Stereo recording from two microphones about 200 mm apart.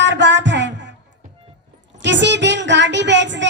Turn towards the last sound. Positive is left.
turn(degrees=-65)  # may be behind; listen again after turning